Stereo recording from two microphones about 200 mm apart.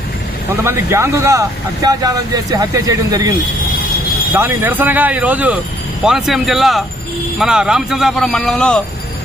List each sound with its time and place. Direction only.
0.6 s speech: 10° right (ahead or behind)
4.4 s speech: 10° right (ahead or behind)